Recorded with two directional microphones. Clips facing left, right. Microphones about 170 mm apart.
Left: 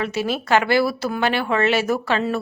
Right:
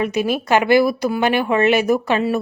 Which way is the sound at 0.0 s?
15° right (ahead or behind).